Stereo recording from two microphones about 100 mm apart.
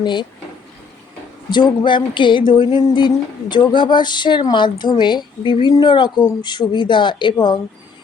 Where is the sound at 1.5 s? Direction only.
50° left (ahead or behind).